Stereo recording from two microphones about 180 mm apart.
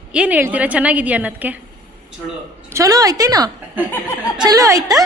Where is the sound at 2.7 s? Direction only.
15° right (ahead or behind).